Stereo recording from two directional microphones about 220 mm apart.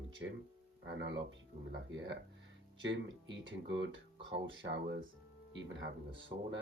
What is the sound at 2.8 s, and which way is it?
Speech, 55° right (ahead or behind).